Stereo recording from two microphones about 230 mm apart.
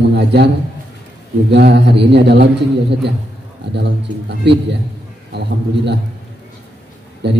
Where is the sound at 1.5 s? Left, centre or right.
Right.